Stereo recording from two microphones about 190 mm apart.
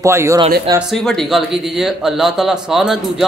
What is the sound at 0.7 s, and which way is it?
Speech, centre (ahead or behind).